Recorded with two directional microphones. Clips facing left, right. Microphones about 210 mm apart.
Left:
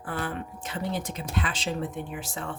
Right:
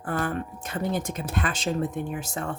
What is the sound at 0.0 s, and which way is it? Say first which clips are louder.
Speech: right 4 dB; 45° right (ahead or behind).